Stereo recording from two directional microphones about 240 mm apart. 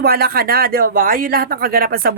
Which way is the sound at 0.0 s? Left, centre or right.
Right.